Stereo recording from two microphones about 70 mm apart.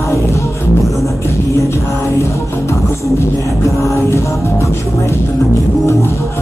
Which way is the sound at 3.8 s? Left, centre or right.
Left.